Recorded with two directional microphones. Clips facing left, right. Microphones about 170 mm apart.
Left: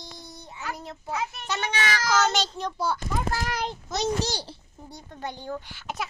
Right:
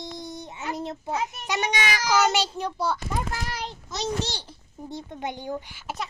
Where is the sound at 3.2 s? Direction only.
50° left (ahead or behind).